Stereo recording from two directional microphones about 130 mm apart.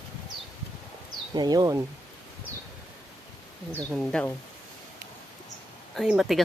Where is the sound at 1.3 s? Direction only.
30° right (ahead or behind).